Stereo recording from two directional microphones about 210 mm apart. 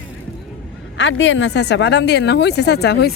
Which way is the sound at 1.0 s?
60° left (ahead or behind).